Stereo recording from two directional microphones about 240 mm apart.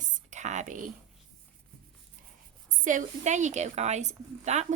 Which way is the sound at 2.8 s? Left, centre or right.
Right.